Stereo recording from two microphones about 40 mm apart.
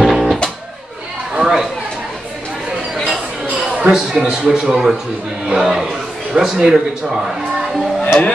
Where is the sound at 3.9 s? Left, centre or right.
Centre.